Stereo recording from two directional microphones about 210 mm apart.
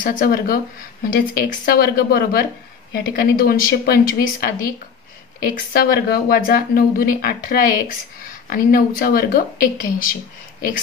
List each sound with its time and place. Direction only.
0.0 s speech: 40° left (ahead or behind)
5.7 s speech: 45° left (ahead or behind)